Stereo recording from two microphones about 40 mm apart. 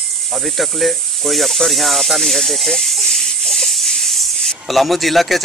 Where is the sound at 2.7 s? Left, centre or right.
Centre.